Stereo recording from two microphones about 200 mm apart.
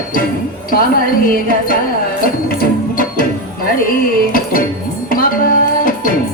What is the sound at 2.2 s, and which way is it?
Music, 45° left (ahead or behind).